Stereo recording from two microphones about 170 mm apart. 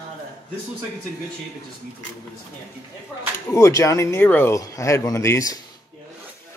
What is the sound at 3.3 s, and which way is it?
Speech, 15° left (ahead or behind).